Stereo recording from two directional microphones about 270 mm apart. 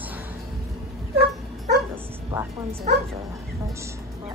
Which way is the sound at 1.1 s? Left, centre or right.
Right.